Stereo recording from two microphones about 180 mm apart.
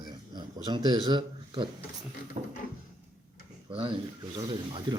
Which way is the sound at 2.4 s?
45° right (ahead or behind).